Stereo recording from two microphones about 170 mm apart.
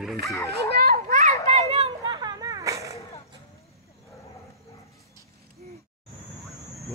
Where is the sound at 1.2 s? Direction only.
40° right (ahead or behind); by 2.9 s 20° right (ahead or behind).